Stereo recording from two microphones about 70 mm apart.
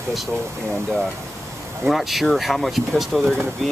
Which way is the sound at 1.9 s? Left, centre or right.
Centre.